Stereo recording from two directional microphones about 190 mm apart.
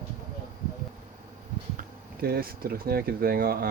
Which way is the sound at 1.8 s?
50° right (ahead or behind).